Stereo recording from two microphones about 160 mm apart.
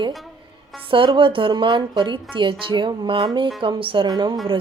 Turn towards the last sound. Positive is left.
turn(degrees=-25)  # may be behind; listen again after turning